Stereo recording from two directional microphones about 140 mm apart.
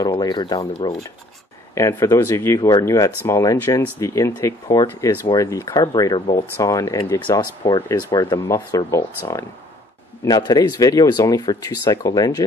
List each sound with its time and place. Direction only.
0.0 s speech: 30° left (ahead or behind)